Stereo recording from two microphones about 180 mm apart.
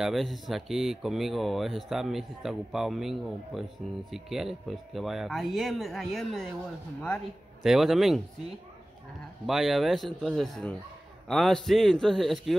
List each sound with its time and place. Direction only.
0.0 s speech: centre (ahead or behind)
7.6 s speech: centre (ahead or behind)
9.5 s speech: centre (ahead or behind)